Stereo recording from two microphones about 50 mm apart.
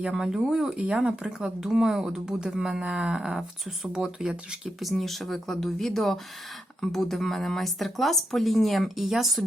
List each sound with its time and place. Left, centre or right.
0.1 s speech: centre
4.8 s speech: centre